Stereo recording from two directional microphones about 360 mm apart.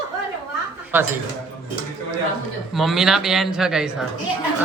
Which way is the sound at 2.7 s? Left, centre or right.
Centre.